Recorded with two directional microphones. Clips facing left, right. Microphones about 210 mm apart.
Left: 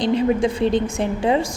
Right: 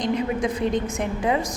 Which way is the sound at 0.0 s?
30° left (ahead or behind).